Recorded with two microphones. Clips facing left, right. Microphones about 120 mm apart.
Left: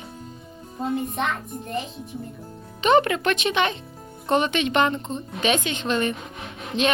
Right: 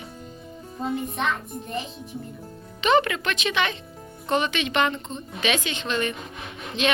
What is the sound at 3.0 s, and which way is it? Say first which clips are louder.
Speech: left 4 dB; 40° left (ahead or behind).